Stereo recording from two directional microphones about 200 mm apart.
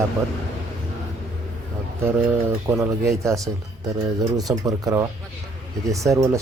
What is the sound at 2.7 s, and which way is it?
Speech, 15° right (ahead or behind).